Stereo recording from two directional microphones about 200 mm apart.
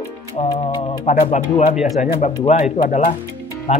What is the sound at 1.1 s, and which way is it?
Speech, 40° left (ahead or behind).